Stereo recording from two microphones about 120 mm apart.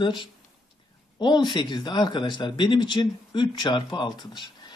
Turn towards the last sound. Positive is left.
turn(degrees=40)  # may be behind; listen again after turning